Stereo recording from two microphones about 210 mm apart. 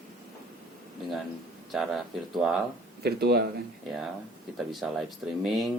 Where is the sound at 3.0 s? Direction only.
50° right (ahead or behind).